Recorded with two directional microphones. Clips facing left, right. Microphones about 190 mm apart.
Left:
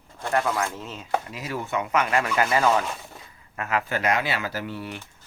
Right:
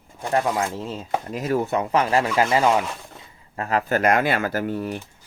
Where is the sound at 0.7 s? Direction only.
35° right (ahead or behind).